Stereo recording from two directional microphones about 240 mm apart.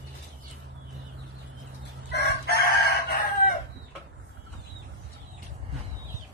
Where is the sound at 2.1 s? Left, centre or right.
Left.